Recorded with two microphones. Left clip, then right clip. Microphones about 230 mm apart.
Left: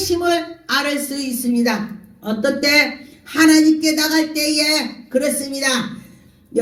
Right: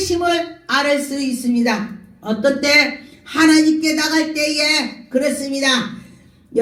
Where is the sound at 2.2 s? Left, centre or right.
Left.